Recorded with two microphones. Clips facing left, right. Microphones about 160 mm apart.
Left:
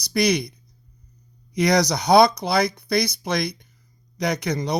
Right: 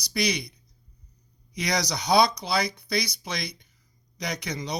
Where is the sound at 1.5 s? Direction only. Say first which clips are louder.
Left 9 dB; 50° left (ahead or behind).